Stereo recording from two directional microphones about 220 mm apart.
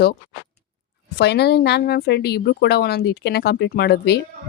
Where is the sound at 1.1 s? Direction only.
50° left (ahead or behind).